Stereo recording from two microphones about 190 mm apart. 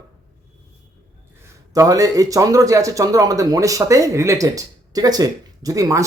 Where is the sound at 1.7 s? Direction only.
20° right (ahead or behind).